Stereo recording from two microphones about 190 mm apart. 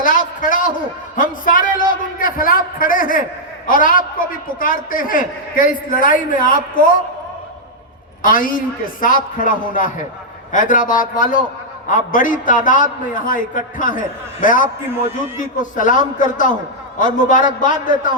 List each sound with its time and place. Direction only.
0.0 s a man's voice: 45° left (ahead or behind)
1.1 s a sound: 45° left (ahead or behind)
2.1 s a man's voice: 50° left (ahead or behind)
8.2 s a man's voice: 45° left (ahead or behind)